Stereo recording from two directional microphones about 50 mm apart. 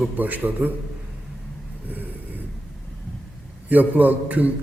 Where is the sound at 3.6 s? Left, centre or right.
Right.